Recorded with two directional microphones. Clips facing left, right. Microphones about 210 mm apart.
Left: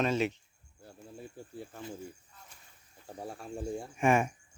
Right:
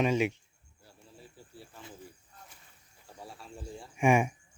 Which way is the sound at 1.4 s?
50° left (ahead or behind).